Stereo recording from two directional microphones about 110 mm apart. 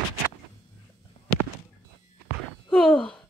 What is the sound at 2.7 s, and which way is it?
Sigh, 5° left (ahead or behind).